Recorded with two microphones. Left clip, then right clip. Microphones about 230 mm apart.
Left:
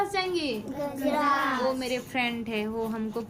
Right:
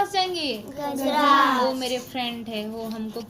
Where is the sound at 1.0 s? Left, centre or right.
Right.